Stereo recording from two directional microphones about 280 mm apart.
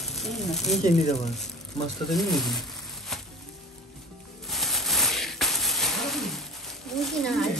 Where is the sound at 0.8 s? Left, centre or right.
Left.